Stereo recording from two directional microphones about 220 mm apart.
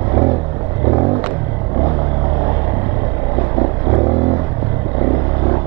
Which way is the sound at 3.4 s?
25° right (ahead or behind).